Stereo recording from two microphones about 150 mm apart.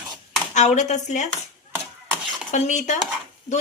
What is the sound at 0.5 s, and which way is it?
Speech, 50° left (ahead or behind).